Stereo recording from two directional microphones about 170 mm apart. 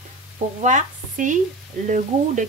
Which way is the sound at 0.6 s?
50° right (ahead or behind).